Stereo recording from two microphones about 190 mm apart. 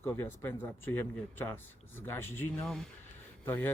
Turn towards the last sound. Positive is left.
turn(degrees=10)  # may be behind; listen again after turning